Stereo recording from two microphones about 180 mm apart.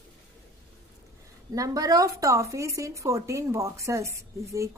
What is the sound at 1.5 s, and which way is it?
Speech, 20° right (ahead or behind).